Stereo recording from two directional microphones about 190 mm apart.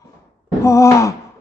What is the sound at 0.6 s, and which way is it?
Speech, 15° left (ahead or behind).